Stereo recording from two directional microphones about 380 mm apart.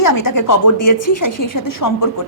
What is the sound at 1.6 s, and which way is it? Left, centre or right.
Speech, left.